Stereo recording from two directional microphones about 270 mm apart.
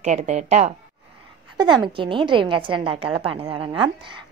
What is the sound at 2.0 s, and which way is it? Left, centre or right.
A woman's voice, centre.